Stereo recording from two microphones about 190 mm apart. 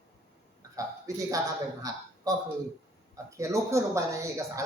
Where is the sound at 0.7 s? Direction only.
15° right (ahead or behind).